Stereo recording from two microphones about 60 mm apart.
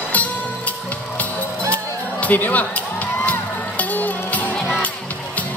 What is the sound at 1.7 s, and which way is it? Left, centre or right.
Music, left.